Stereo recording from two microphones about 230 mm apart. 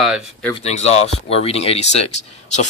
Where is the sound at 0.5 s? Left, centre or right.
Left.